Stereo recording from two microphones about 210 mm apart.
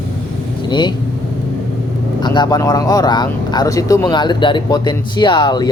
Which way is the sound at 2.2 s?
20° left (ahead or behind).